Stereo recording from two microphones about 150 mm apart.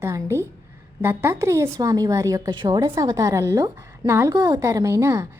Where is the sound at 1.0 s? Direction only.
15° right (ahead or behind).